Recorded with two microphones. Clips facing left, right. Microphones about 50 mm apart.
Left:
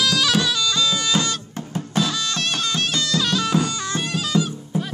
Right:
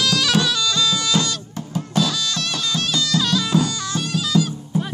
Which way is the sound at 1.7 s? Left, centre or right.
Left.